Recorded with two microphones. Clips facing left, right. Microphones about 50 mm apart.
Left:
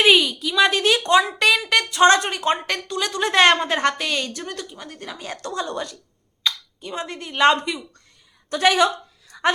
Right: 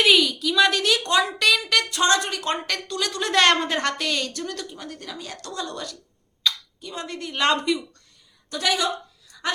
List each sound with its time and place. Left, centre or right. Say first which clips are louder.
0.0 s a woman's voice: left 2 dB; left
2.0 s speech: left 6 dB; left
2.3 s a woman's voice: left 4 dB; left
5.0 s a woman's voice: left 4 dB; left; by 7.8 s centre
8.4 s a woman's voice: left 7 dB; left
9.3 s a sound: left 9 dB; left